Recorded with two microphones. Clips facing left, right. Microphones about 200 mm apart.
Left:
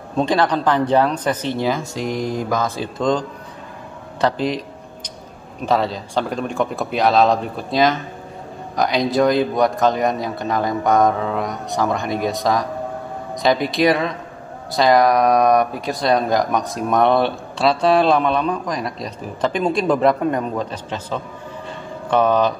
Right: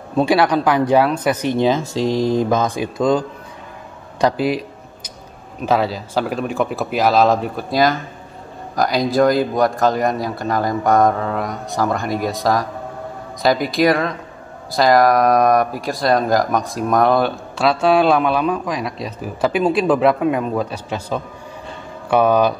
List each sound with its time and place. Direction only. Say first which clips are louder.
0.2 s speech: right 3 dB; 10° right (ahead or behind)
4.2 s a sound: right 2 dB; 10° right (ahead or behind)
5.7 s speech: right 1 dB; 5° right (ahead or behind)